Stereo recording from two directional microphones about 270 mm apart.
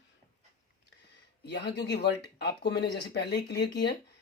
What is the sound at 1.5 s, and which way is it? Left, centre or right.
Speech, left.